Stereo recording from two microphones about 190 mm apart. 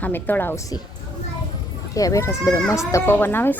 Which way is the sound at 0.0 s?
10° left (ahead or behind).